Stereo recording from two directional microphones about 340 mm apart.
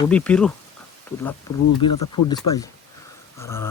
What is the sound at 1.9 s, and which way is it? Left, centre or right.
Speech, left.